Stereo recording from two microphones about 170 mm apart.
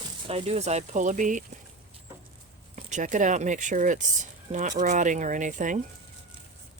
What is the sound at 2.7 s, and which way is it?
Speech, 45° right (ahead or behind).